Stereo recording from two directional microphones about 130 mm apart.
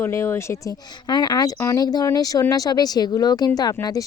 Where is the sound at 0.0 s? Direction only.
20° left (ahead or behind).